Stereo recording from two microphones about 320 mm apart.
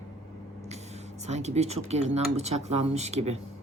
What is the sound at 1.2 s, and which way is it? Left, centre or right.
Speech, right.